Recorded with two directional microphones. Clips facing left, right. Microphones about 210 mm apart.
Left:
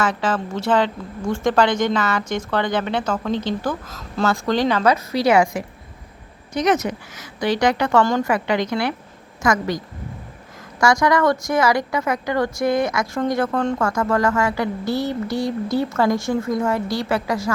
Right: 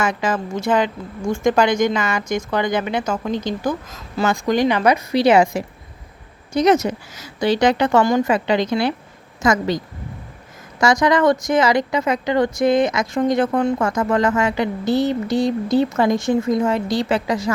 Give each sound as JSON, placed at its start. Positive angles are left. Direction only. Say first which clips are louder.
{"t": 0.0, "sound": "speech", "louder": "right 1 dB", "side_deg": -10}
{"t": 8.3, "sound": "speech", "louder": "right 2 dB", "side_deg": -25}
{"t": 10.8, "sound": "speech", "louder": "right 1 dB", "side_deg": -20}